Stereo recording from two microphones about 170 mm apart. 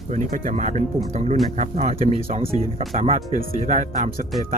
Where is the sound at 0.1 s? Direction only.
50° right (ahead or behind).